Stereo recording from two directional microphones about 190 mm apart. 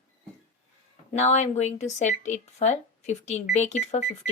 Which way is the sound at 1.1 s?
40° left (ahead or behind).